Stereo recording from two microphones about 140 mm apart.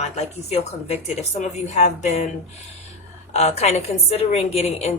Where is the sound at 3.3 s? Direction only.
50° left (ahead or behind).